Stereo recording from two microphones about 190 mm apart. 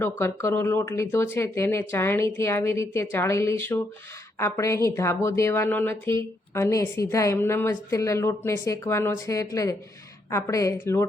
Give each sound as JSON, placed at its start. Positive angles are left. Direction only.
{"t": 0.0, "sound": "speech", "side_deg": 10}